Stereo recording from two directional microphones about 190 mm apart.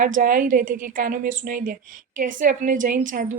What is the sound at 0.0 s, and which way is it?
A woman's voice, 45° right (ahead or behind).